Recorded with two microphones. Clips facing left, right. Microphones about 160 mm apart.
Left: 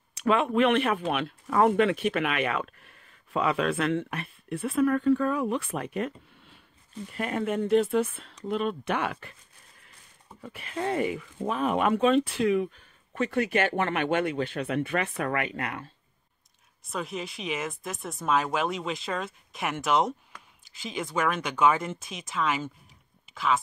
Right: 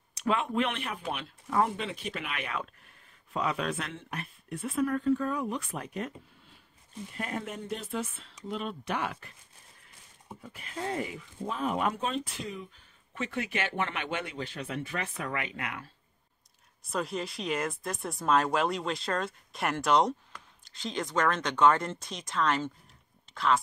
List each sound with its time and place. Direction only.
0.2 s speech: 70° left (ahead or behind)
7.2 s speech: 90° left
10.4 s speech: 75° left (ahead or behind)
13.1 s speech: 50° left (ahead or behind)
16.9 s speech: centre (ahead or behind)